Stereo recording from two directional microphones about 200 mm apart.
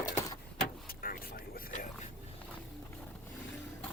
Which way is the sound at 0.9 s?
45° left (ahead or behind).